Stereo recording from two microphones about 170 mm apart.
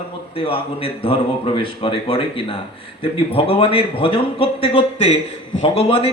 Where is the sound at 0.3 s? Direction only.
30° left (ahead or behind).